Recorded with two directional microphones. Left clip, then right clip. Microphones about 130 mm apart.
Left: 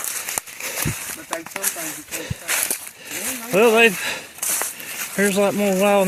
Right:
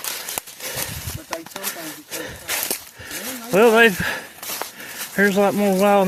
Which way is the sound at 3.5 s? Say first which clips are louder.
Right 1 dB; 35° right (ahead or behind).